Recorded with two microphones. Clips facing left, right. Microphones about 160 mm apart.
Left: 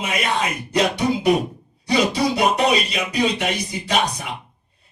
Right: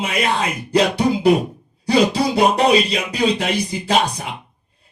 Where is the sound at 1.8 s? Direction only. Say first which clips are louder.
Right 3 dB; 30° right (ahead or behind).